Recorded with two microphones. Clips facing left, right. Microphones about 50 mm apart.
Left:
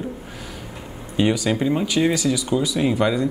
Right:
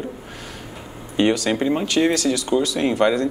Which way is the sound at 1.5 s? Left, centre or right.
Centre.